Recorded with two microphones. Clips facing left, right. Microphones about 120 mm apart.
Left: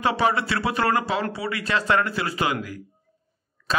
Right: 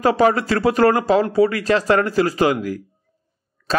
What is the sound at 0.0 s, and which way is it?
A man's voice, 45° right (ahead or behind).